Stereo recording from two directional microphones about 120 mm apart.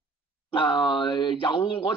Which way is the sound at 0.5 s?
45° left (ahead or behind).